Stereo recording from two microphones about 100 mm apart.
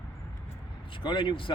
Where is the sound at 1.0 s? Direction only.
55° left (ahead or behind).